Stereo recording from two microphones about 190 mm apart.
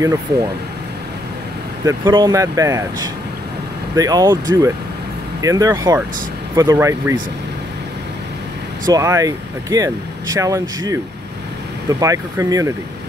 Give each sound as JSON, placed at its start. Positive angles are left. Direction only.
{"t": 1.9, "sound": "speech", "side_deg": -20}
{"t": 8.8, "sound": "speech", "side_deg": -15}